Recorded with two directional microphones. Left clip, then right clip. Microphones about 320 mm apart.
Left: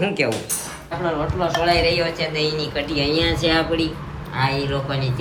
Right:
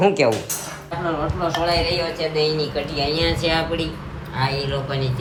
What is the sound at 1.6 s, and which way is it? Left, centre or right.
Speech, centre.